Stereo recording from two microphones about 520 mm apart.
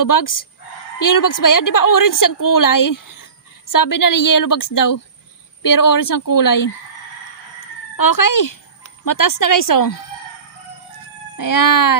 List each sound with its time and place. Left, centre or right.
0.0 s a woman's voice: left
7.9 s speech: left
11.3 s a woman's voice: left